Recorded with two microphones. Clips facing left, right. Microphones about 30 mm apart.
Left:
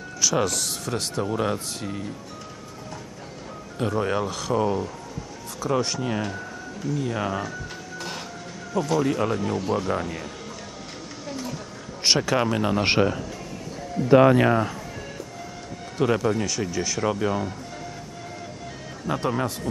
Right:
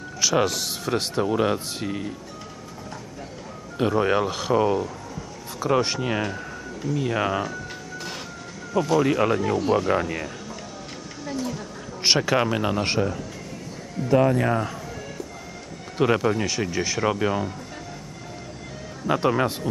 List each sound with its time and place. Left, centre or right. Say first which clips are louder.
0.2 s speech: right 2 dB; centre
3.7 s speech: right 4 dB; centre
8.7 s speech: right 3 dB; centre
9.0 s speech: right 3 dB; right
12.0 s speech: right 1 dB; centre
12.8 s a man's voice: left 3 dB; left
14.5 s speech: left 2 dB; centre
16.0 s speech: right 1 dB; centre
19.0 s speech: right 4 dB; right